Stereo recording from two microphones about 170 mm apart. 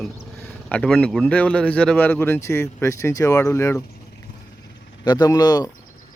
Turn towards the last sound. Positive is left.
turn(degrees=25)  # may be behind; listen again after turning